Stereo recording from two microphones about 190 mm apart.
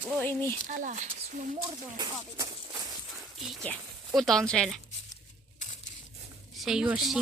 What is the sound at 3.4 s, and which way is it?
Speech, centre (ahead or behind).